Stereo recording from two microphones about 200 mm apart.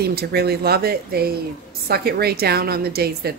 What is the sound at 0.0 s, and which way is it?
A woman's voice, 50° right (ahead or behind).